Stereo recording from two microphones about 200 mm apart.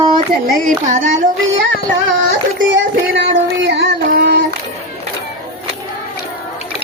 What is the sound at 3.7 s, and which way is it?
Child singing, 55° right (ahead or behind).